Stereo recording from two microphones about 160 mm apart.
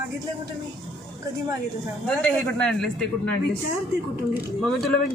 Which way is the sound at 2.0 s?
5° left (ahead or behind).